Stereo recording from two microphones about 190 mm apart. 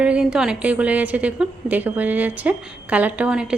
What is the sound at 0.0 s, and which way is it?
A woman's voice, 5° right (ahead or behind).